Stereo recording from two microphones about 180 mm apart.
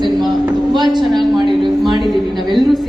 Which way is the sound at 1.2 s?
Centre (ahead or behind).